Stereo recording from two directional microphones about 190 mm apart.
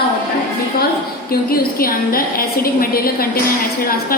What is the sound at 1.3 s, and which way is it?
A woman's voice, 50° left (ahead or behind).